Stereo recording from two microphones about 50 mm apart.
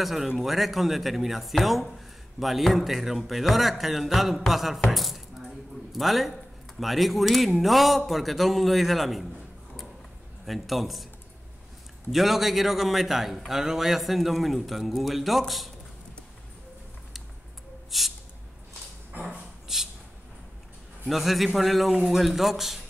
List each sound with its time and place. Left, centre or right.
0.0 s a man's voice: centre
10.4 s a man's voice: centre
12.1 s a man's voice: centre
17.9 s a man's voice: centre
19.7 s a sound: centre
21.1 s a man's voice: centre